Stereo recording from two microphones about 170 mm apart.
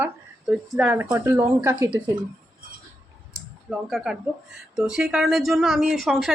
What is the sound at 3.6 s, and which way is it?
Speech, centre (ahead or behind).